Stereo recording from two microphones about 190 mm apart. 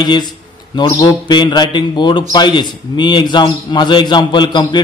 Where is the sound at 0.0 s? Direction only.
20° left (ahead or behind).